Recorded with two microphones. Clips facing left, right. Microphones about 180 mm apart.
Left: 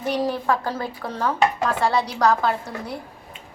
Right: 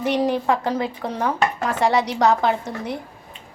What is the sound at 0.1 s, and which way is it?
A woman's voice, 20° right (ahead or behind).